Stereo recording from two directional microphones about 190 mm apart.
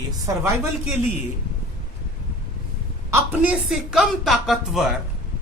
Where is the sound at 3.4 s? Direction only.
5° right (ahead or behind).